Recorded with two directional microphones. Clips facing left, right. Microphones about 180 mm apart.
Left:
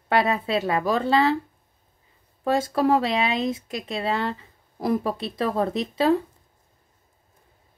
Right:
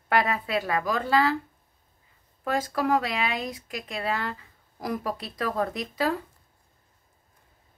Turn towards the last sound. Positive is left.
turn(degrees=25)  # may be behind; listen again after turning